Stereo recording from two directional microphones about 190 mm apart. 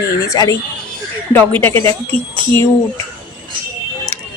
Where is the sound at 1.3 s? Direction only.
10° left (ahead or behind).